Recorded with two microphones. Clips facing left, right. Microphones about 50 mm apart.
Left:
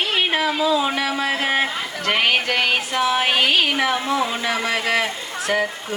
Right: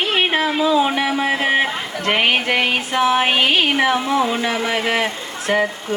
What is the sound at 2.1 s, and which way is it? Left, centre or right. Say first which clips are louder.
Speech: right 2 dB; right.